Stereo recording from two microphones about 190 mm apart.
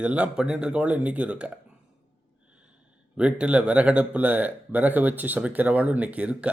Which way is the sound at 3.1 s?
5° right (ahead or behind).